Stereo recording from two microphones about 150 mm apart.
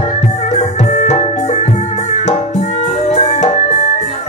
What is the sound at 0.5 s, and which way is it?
Music, 55° left (ahead or behind).